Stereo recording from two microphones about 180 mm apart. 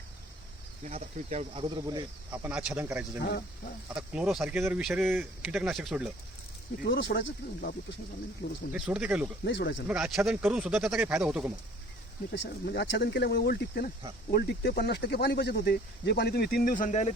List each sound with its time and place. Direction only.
0.9 s speech: 40° right (ahead or behind)
1.7 s speech: 20° right (ahead or behind)
2.3 s speech: 5° right (ahead or behind)
5.0 s speech: 10° right (ahead or behind)
5.5 s speech: centre (ahead or behind)
6.8 s speech: 70° left (ahead or behind)
8.7 s speech: 5° right (ahead or behind)
9.4 s speech: 75° left (ahead or behind)
9.8 s speech: 5° right (ahead or behind)
12.3 s speech: 70° left (ahead or behind); by 17.1 s 45° left (ahead or behind)